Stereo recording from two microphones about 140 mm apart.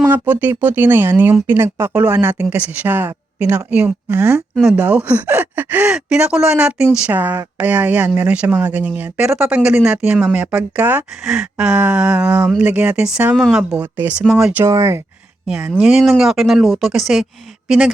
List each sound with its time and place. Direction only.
0.1 s speech: 15° right (ahead or behind)
14.6 s speech: 20° right (ahead or behind)
15.4 s speech: 5° right (ahead or behind)